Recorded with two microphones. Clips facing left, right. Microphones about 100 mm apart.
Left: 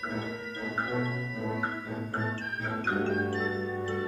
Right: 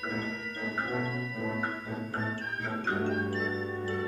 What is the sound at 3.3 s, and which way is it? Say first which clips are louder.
Music: left 1 dB; 5° left (ahead or behind).